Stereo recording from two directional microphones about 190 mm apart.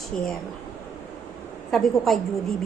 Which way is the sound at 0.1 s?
5° left (ahead or behind).